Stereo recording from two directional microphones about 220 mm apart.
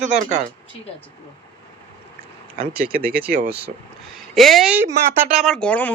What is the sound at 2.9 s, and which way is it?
Speech, 45° right (ahead or behind).